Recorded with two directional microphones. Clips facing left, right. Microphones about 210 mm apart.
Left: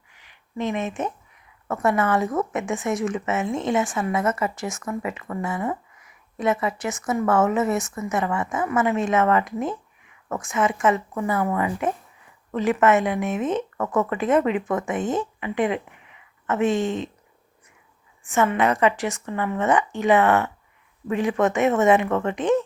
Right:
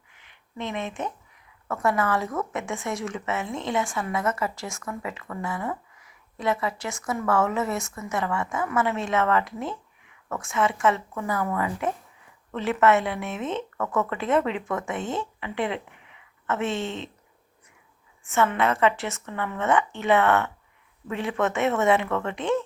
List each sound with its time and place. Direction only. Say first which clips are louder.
0.5 s speech: left 5 dB; 15° left (ahead or behind)
18.3 s speech: left 3 dB; 15° left (ahead or behind)